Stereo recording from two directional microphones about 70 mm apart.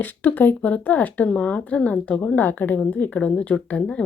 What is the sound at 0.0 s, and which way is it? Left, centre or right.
A woman's voice, left.